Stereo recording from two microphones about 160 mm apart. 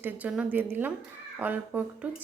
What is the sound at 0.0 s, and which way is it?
Speech, 10° right (ahead or behind).